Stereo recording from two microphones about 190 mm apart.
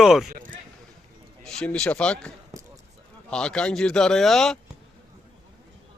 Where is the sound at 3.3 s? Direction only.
5° left (ahead or behind).